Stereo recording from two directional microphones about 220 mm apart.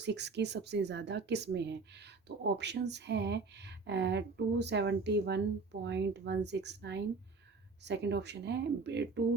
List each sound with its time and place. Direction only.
0.0 s speech: 50° right (ahead or behind)